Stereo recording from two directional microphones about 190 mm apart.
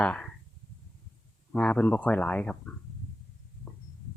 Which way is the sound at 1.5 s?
5° left (ahead or behind).